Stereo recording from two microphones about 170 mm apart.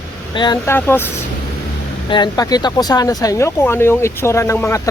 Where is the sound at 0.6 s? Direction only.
15° left (ahead or behind).